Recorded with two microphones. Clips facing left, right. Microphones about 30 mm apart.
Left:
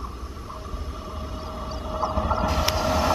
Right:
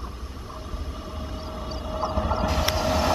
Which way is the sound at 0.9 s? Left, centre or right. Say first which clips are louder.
Even; centre.